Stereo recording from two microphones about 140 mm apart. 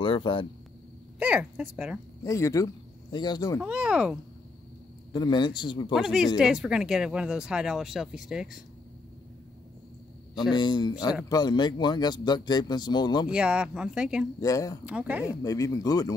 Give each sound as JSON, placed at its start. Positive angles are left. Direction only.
{"t": 0.0, "sound": "speech", "side_deg": 40}
{"t": 1.2, "sound": "speech", "side_deg": -10}
{"t": 2.2, "sound": "speech", "side_deg": 20}
{"t": 3.6, "sound": "speech", "side_deg": -10}
{"t": 5.1, "sound": "speech", "side_deg": 30}
{"t": 5.9, "sound": "speech", "side_deg": -5}
{"t": 10.5, "sound": "speech", "side_deg": 35}
{"t": 13.3, "sound": "speech", "side_deg": -5}
{"t": 14.4, "sound": "speech", "side_deg": 25}
{"t": 14.9, "sound": "speech", "side_deg": -10}
{"t": 15.4, "sound": "speech", "side_deg": 25}